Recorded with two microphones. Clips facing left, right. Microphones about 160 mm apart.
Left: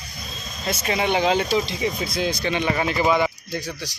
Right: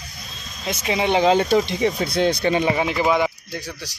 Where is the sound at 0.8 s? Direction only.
25° right (ahead or behind).